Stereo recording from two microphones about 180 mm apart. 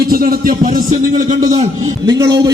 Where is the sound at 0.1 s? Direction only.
55° right (ahead or behind).